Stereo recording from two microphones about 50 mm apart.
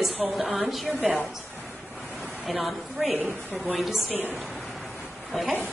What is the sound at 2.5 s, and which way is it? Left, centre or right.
A woman's voice, centre.